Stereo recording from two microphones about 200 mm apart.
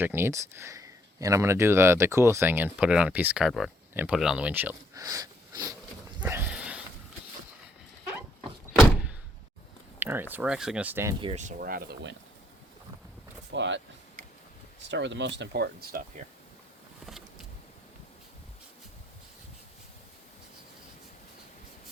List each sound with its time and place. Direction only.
0.0 s speech: 10° right (ahead or behind)
6.1 s a sound: 10° right (ahead or behind)
8.7 s door: centre (ahead or behind)
10.0 s speech: 10° right (ahead or behind)
11.2 s speech: 30° right (ahead or behind); by 12.1 s 50° right (ahead or behind)
13.5 s speech: 65° right (ahead or behind)
17.1 s vehicle: centre (ahead or behind)